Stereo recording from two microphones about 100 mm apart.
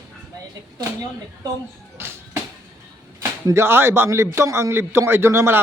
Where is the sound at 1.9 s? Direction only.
25° right (ahead or behind).